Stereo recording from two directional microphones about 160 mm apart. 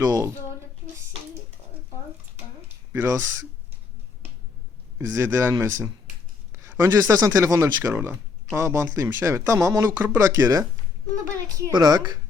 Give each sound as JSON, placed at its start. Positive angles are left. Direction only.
{"t": 0.0, "sound": "speech", "side_deg": -20}
{"t": 2.9, "sound": "speech", "side_deg": -15}
{"t": 4.9, "sound": "speech", "side_deg": -15}